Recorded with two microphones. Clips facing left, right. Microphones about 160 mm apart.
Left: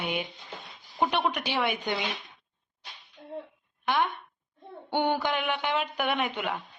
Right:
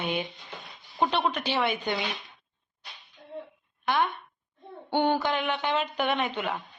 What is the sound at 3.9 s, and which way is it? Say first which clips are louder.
A man's voice: right 1 dB; 15° left (ahead or behind).